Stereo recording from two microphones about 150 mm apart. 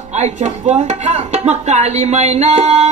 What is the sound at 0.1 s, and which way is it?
Speech, 50° right (ahead or behind).